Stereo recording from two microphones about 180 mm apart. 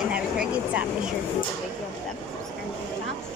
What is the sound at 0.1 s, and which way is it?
Vehicle, 5° right (ahead or behind).